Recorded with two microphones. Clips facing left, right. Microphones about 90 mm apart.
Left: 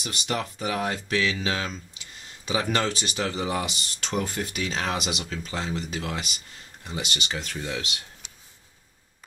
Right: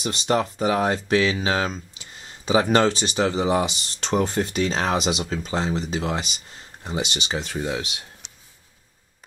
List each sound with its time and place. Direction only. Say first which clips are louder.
0.0 s speech: right 7 dB; 30° right (ahead or behind)
2.2 s a sound: right 8 dB; 35° right (ahead or behind)
2.7 s speech: right 7 dB; 35° right (ahead or behind)
3.3 s speech: right 7 dB; 20° right (ahead or behind)
4.0 s speech: right 7 dB; 30° right (ahead or behind)